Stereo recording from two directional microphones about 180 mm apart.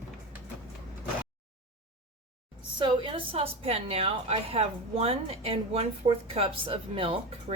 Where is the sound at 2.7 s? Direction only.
30° right (ahead or behind).